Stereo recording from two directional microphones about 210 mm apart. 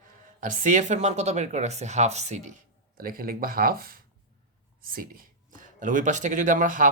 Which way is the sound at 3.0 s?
45° right (ahead or behind).